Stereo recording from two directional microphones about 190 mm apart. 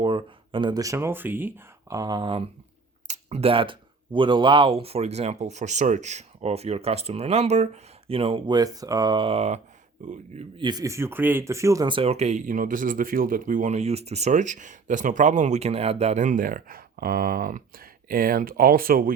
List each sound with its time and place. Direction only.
0.0 s speech: 25° right (ahead or behind)
10.6 s speech: 20° right (ahead or behind); by 19.1 s 50° right (ahead or behind)